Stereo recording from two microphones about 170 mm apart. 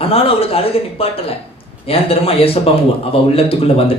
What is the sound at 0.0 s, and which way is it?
Speech, 35° left (ahead or behind).